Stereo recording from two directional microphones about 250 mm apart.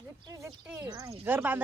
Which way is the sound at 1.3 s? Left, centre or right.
Centre.